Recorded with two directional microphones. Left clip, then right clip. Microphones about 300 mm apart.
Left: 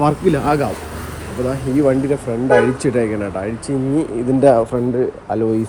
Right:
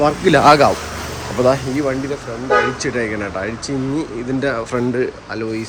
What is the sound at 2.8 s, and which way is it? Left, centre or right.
Speech, centre.